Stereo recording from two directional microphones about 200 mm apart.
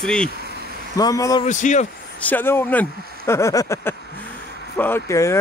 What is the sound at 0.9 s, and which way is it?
Speech, 15° left (ahead or behind).